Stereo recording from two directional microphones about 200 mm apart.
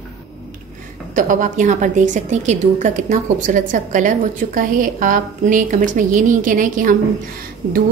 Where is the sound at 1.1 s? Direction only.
40° right (ahead or behind).